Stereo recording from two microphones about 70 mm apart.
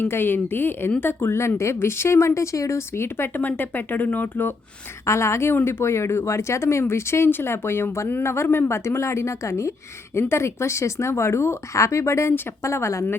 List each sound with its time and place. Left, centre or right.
0.0 s speech: left
5.0 s speech: left